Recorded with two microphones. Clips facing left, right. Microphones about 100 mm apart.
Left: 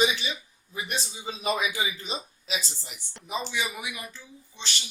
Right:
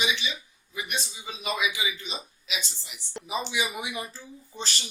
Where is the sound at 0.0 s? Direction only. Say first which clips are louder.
Left 4 dB; 40° left (ahead or behind).